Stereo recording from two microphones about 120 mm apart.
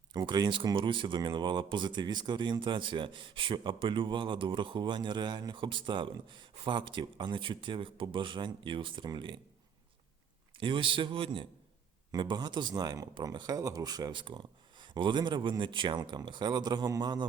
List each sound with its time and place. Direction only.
0.1 s speech: 35° right (ahead or behind)
10.6 s speech: 45° right (ahead or behind)